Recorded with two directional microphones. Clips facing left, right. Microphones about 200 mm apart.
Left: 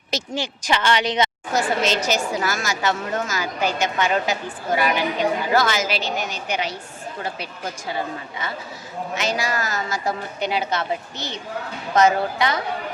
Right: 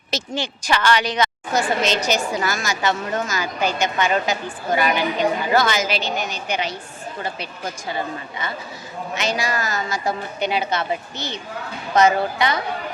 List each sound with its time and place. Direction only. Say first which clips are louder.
0.1 s a woman's voice: even; 10° left (ahead or behind)
0.7 s speech: right 1 dB; 25° left (ahead or behind)
1.5 s a woman's voice: right 1 dB; 5° left (ahead or behind)